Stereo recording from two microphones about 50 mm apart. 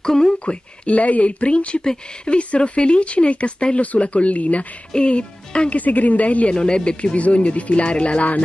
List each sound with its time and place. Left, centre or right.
0.0 s speech: centre
0.8 s speech: left
5.8 s speech: left
6.5 s speech: centre